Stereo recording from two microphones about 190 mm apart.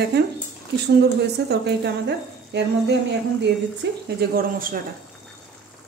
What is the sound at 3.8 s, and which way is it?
Speech, 65° right (ahead or behind).